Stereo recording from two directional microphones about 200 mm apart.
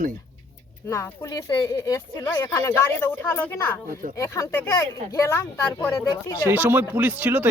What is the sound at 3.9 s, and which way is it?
Speech, 45° right (ahead or behind).